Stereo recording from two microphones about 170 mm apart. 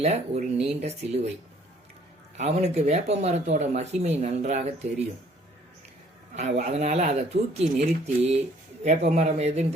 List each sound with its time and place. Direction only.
0.0 s speech: 40° right (ahead or behind)
2.4 s speech: 40° right (ahead or behind)
6.3 s speech: 45° right (ahead or behind)